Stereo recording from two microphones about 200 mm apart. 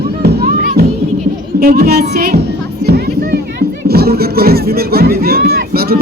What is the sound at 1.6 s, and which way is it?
Music, 50° right (ahead or behind).